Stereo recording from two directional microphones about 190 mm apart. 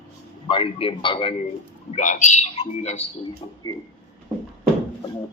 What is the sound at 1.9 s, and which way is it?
A man's voice, 40° left (ahead or behind).